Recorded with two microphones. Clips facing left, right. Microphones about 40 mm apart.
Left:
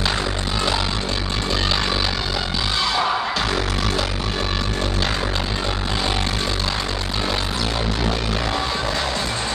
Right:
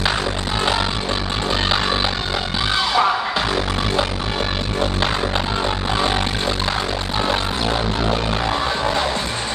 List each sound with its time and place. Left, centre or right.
2.8 s music: centre